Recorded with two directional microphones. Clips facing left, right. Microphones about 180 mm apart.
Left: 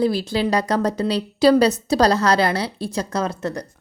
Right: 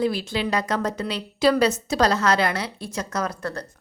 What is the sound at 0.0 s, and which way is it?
A woman's voice, 35° left (ahead or behind).